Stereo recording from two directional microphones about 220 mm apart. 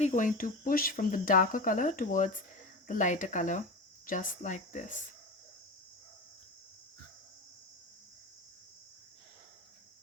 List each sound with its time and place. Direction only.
0.0 s speech: 35° left (ahead or behind)